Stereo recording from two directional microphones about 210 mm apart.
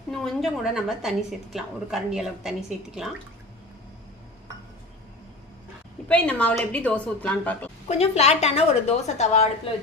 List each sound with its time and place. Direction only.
0.1 s speech: centre (ahead or behind)
6.1 s a woman's voice: 5° left (ahead or behind)
7.9 s a woman's voice: 30° left (ahead or behind)